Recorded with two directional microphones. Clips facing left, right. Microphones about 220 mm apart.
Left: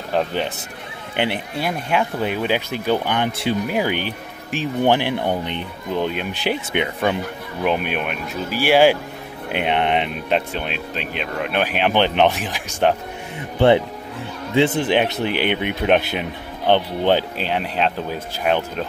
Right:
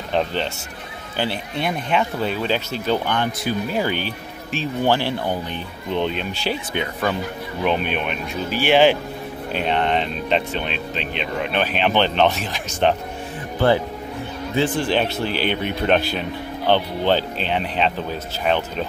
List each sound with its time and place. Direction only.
0.1 s speech: 10° left (ahead or behind)
1.6 s speech: 5° left (ahead or behind)
3.3 s speech: 25° left (ahead or behind)
3.6 s speech: 15° left (ahead or behind)
5.9 s speech: 10° left (ahead or behind)
7.6 s speech: 10° left (ahead or behind)
13.6 s speech: 25° left (ahead or behind); by 18.9 s 5° left (ahead or behind)